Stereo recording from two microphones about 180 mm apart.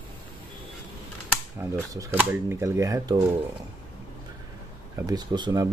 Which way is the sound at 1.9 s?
15° right (ahead or behind).